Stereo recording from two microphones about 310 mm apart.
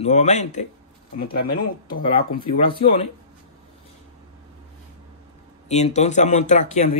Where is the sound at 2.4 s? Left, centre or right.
Centre.